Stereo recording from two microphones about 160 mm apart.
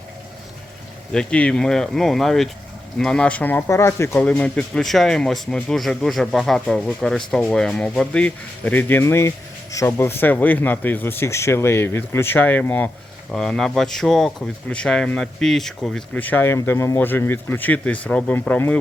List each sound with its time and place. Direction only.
1.1 s speech: 5° left (ahead or behind)